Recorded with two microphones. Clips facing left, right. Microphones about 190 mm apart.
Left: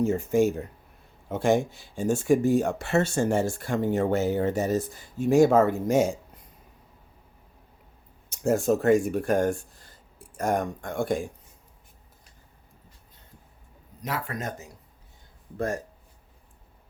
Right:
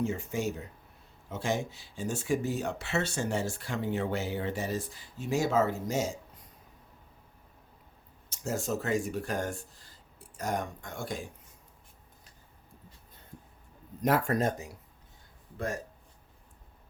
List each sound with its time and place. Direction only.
0.0 s speech: 45° left (ahead or behind)
8.3 s speech: 55° left (ahead or behind)
14.0 s speech: 50° right (ahead or behind)